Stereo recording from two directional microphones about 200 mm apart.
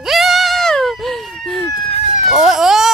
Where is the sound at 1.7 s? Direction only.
30° left (ahead or behind).